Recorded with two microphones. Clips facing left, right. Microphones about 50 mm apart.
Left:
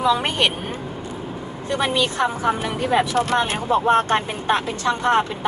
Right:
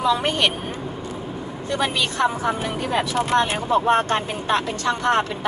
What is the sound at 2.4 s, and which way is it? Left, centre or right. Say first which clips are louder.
Speech: left 2 dB; centre.